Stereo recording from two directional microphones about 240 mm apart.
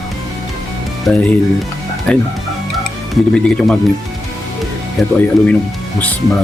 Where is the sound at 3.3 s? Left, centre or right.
Centre.